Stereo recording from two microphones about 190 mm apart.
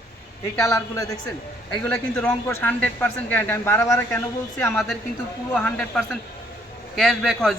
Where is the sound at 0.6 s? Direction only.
20° left (ahead or behind).